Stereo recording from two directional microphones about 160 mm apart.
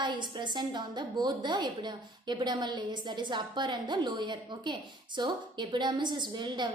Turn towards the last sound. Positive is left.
turn(degrees=-30)  # may be behind; listen again after turning